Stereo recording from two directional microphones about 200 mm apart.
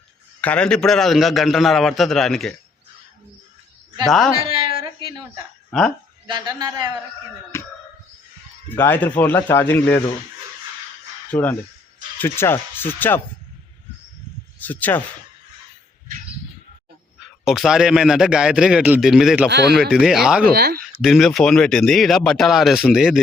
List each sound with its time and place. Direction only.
0.4 s speech: 5° left (ahead or behind)
4.8 s a sound: 20° right (ahead or behind)
5.7 s speech: centre (ahead or behind)
6.2 s a man's voice: 20° right (ahead or behind)
7.5 s a sound: 10° left (ahead or behind)
8.7 s speech: 10° left (ahead or behind)
11.3 s speech: 10° left (ahead or behind)
14.6 s speech: 10° left (ahead or behind)
17.4 s speech: centre (ahead or behind)
19.5 s speech: 55° right (ahead or behind)
19.9 s speech: centre (ahead or behind)
20.5 s speech: 50° right (ahead or behind)
21.0 s speech: centre (ahead or behind)